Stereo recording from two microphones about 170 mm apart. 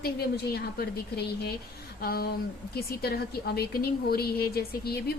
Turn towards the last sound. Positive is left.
turn(degrees=65)  # may be behind; listen again after turning